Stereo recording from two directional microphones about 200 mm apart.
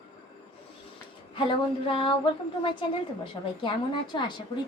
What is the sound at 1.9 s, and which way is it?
A woman's voice, 25° left (ahead or behind).